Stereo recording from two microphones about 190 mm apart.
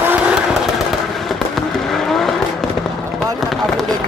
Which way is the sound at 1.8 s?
Centre (ahead or behind).